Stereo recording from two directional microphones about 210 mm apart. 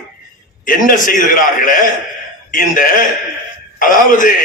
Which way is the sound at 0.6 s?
40° left (ahead or behind).